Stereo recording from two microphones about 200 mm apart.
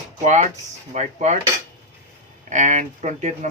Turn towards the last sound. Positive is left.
turn(degrees=-35)  # may be behind; listen again after turning